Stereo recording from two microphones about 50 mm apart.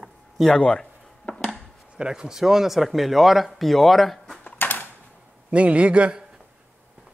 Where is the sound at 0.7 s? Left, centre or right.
Centre.